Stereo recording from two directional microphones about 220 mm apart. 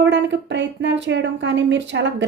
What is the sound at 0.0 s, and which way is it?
A woman's voice, 55° right (ahead or behind).